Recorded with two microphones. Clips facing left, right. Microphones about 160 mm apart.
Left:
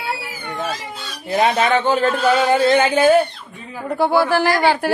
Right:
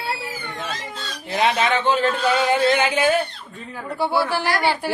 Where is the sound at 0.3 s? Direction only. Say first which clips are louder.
Left 4 dB; 10° left (ahead or behind).